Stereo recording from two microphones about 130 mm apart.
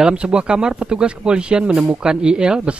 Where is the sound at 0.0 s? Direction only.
5° right (ahead or behind).